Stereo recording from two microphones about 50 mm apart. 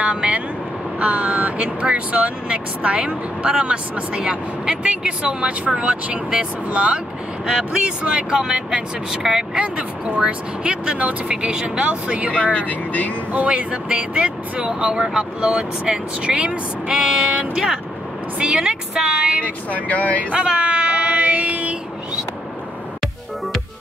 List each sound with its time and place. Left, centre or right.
0.0 s vehicle: right
0.9 s speech: right
7.4 s speech: centre
12.5 s speech: left
13.3 s speech: right
19.4 s speech: left
20.3 s child singing: right